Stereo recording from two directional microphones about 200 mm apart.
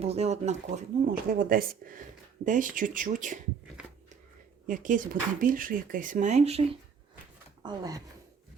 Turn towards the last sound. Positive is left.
turn(degrees=-20)  # may be behind; listen again after turning